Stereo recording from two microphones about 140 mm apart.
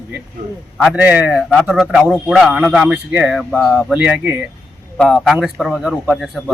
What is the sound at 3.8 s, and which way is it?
Speech, 10° right (ahead or behind).